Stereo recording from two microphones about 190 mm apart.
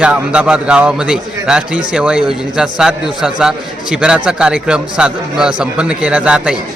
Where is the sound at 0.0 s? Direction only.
5° right (ahead or behind).